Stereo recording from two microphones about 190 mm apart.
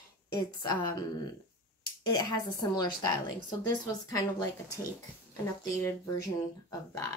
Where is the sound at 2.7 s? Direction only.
20° left (ahead or behind).